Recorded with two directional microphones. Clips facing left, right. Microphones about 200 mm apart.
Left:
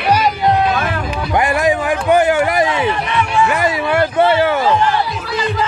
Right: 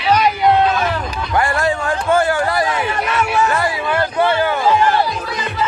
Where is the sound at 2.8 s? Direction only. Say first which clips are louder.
Left 2 dB; 45° right (ahead or behind).